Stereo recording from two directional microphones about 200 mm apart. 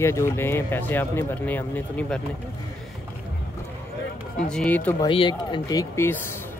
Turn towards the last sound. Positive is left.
turn(degrees=15)  # may be behind; listen again after turning